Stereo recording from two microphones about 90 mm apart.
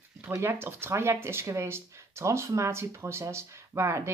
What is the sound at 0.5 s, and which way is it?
Speech, 25° right (ahead or behind).